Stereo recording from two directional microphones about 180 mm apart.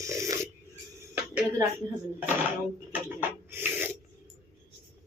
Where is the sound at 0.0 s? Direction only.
15° right (ahead or behind).